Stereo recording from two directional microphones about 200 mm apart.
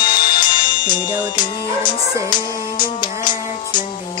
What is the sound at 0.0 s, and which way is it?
Music, 25° left (ahead or behind).